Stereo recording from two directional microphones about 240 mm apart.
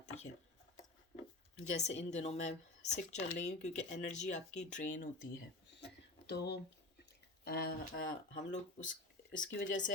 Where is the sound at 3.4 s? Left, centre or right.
Left.